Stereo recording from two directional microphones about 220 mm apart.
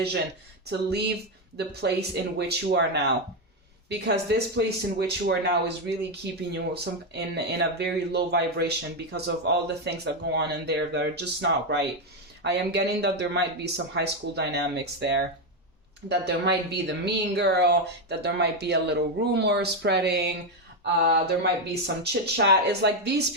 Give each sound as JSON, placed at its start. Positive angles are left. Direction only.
{"t": 0.7, "sound": "speech", "side_deg": -50}